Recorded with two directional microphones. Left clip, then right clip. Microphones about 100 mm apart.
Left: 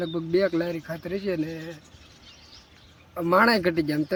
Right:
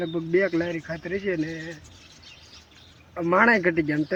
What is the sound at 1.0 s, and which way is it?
Speech, 30° left (ahead or behind).